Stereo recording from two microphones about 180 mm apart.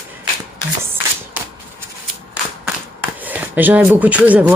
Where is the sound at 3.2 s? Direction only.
10° right (ahead or behind).